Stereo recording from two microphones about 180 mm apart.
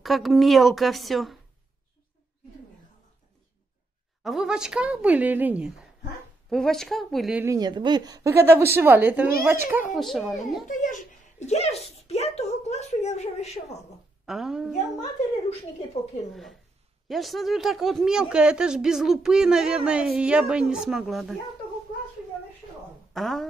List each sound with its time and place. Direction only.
0.0 s speech: centre (ahead or behind)
4.2 s a woman's voice: centre (ahead or behind)
6.5 s speech: centre (ahead or behind)
7.4 s a woman's voice: 20° right (ahead or behind)
9.8 s speech: centre (ahead or behind)
10.7 s speech: 45° left (ahead or behind)
14.2 s speech: centre (ahead or behind)
17.1 s speech: centre (ahead or behind)
23.1 s speech: centre (ahead or behind)